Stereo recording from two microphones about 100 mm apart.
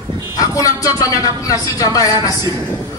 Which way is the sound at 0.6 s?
35° left (ahead or behind).